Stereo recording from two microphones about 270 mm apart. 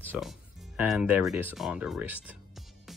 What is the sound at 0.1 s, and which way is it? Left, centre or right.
Speech, centre.